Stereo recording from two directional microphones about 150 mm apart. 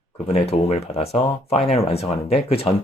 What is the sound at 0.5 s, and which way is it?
Speech, 45° left (ahead or behind).